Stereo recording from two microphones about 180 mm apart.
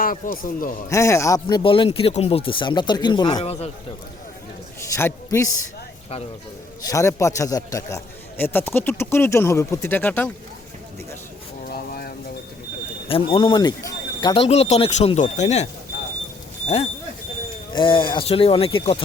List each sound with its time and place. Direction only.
0.0 s a man's voice: 50° left (ahead or behind)
0.9 s speech: 15° left (ahead or behind); by 3.7 s 35° left (ahead or behind)
4.9 s a man's voice: 15° left (ahead or behind)
6.8 s a man's voice: 15° left (ahead or behind)
11.7 s a sound: 60° left (ahead or behind)
13.1 s speech: 30° left (ahead or behind)
17.7 s speech: 30° left (ahead or behind)